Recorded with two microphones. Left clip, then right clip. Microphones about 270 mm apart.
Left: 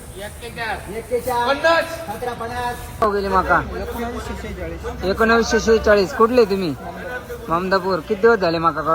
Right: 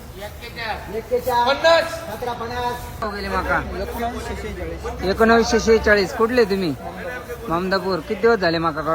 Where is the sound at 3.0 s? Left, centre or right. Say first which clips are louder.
Left 10 dB; centre.